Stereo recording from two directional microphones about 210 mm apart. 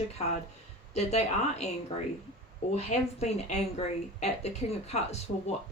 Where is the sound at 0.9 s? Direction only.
30° left (ahead or behind).